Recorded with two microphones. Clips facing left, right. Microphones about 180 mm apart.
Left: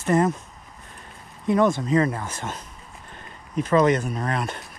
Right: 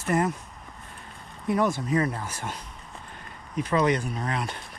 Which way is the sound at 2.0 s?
25° left (ahead or behind).